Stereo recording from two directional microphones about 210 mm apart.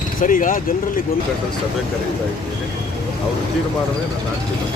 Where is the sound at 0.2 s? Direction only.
40° left (ahead or behind).